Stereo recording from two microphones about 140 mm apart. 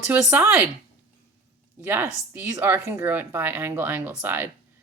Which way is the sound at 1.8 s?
15° right (ahead or behind).